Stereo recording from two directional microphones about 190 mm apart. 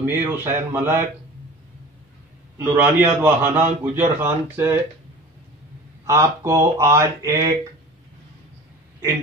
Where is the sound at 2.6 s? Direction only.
10° right (ahead or behind).